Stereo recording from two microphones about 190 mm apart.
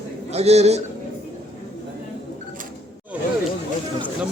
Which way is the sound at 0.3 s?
35° right (ahead or behind).